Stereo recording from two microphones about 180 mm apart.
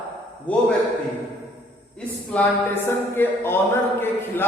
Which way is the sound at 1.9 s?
5° left (ahead or behind).